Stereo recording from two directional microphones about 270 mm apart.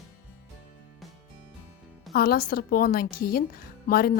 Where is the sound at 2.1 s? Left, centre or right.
Left.